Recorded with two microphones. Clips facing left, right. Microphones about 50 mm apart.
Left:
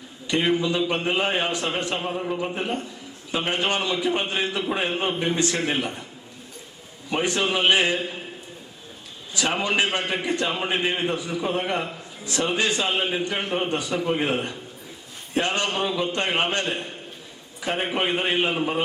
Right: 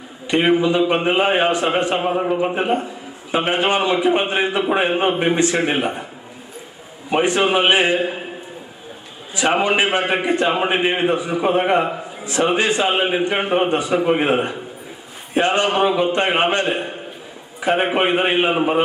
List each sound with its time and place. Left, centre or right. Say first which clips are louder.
0.3 s a man's voice: right 6 dB; right
7.1 s a man's voice: right 7 dB; right
9.3 s a man's voice: right 7 dB; right